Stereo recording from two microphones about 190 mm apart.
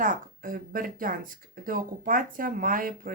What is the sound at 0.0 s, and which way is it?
Speech, 45° right (ahead or behind).